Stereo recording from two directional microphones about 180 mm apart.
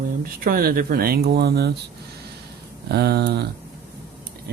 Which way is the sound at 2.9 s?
65° right (ahead or behind).